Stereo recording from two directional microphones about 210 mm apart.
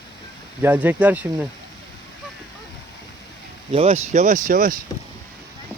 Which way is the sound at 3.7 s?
30° right (ahead or behind).